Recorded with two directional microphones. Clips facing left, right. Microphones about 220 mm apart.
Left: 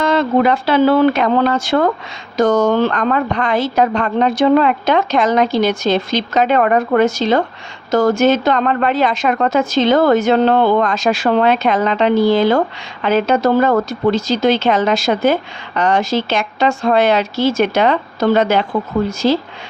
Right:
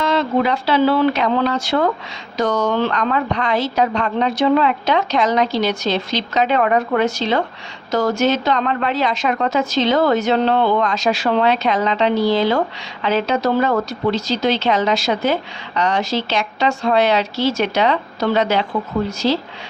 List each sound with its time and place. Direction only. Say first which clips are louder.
0.0 s a woman's voice: left 4 dB; 50° left (ahead or behind)